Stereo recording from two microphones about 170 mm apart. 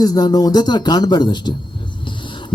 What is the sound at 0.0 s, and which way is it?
Speech, 20° left (ahead or behind).